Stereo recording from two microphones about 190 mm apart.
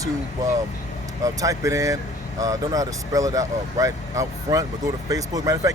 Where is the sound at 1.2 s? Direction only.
15° right (ahead or behind).